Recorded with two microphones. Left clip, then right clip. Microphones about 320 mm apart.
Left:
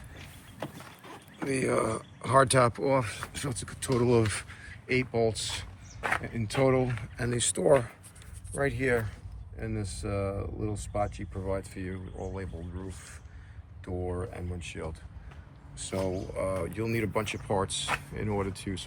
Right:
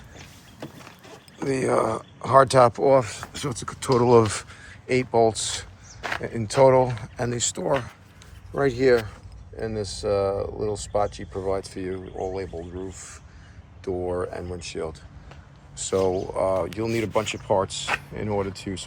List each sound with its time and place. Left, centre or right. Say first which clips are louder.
1.4 s speech: right 6 dB; centre
6.0 s speech: even; centre
6.4 s speech: right 11 dB; centre
7.3 s speech: left 2 dB; centre
13.8 s speech: right 9 dB; centre